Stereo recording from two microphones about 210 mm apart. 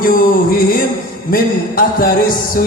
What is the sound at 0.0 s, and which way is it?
A man's voice, 40° left (ahead or behind).